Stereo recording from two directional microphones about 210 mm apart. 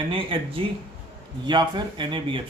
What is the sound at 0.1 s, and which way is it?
Speech, 25° right (ahead or behind).